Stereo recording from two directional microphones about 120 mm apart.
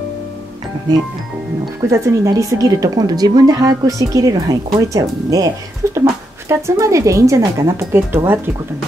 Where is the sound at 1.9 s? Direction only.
25° right (ahead or behind).